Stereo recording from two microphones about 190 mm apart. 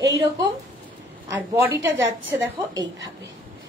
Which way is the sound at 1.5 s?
15° right (ahead or behind).